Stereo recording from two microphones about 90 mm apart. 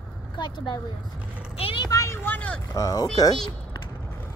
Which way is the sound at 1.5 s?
90° left.